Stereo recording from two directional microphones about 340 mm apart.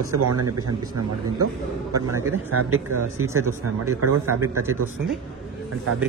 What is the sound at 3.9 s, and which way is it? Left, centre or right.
Speech, right.